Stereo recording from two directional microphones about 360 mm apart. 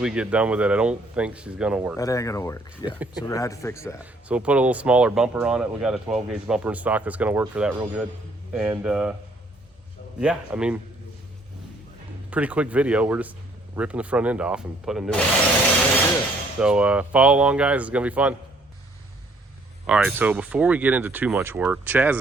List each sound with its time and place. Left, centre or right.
0.0 s speech: centre
2.0 s speech: centre
4.0 s speech: centre
10.2 s speech: centre
12.3 s speech: centre
16.6 s speech: centre
19.9 s speech: centre